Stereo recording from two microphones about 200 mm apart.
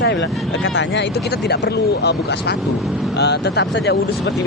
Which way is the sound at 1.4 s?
55° left (ahead or behind).